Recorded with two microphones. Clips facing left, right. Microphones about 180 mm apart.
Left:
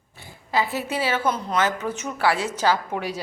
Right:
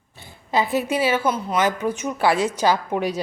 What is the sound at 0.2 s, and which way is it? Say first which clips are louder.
A woman's voice: right 2 dB; 20° right (ahead or behind).